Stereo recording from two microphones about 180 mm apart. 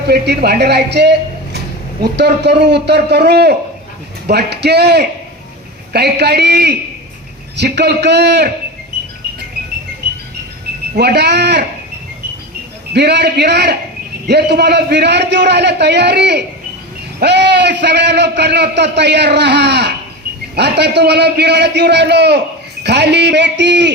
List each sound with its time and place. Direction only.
0.1 s a man's voice: 65° right (ahead or behind)
10.9 s speech: 65° right (ahead or behind)
12.9 s a man's voice: 65° right (ahead or behind)